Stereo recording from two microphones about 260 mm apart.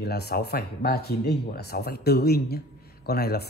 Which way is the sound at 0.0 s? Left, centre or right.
Left.